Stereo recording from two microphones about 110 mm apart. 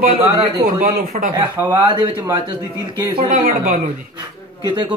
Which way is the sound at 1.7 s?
40° right (ahead or behind).